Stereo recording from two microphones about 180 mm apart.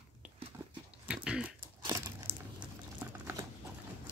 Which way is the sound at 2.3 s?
30° right (ahead or behind).